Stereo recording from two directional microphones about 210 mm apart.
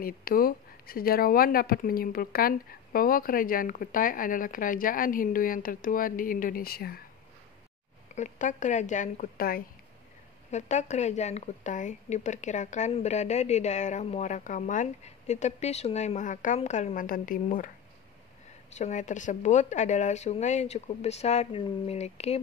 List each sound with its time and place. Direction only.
0.0 s speech: 45° left (ahead or behind)
8.1 s a woman's voice: 35° left (ahead or behind)
18.8 s a woman's voice: 35° left (ahead or behind)